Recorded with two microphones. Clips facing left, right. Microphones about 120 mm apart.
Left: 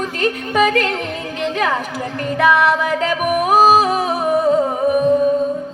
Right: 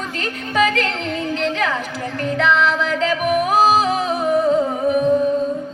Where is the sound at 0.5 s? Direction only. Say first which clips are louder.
Left 2 dB; 50° left (ahead or behind).